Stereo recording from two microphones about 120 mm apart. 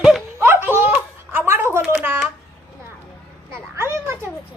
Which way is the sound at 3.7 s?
20° right (ahead or behind).